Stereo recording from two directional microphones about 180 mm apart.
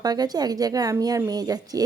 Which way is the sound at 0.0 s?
20° right (ahead or behind).